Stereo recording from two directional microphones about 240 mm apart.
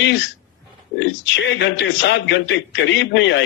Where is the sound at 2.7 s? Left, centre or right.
Left.